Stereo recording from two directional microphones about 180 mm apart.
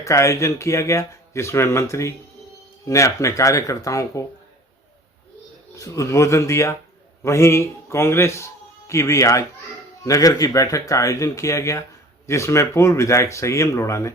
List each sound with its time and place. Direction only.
0.0 s speech: 15° left (ahead or behind)
5.7 s speech: 20° left (ahead or behind)